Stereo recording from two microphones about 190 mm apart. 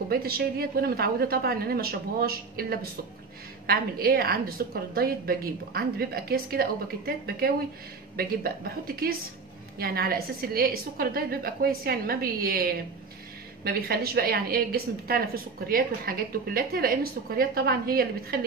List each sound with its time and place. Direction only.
0.1 s a woman's voice: 55° right (ahead or behind)